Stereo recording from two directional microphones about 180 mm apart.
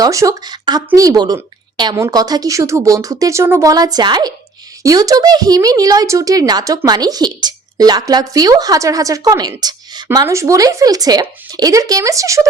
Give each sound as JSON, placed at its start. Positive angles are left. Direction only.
{"t": 0.0, "sound": "speech", "side_deg": -20}